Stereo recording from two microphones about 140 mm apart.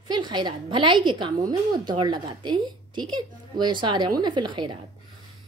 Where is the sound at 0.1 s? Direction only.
30° right (ahead or behind).